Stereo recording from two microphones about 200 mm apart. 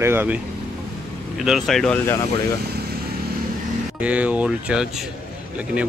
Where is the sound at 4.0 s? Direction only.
5° right (ahead or behind).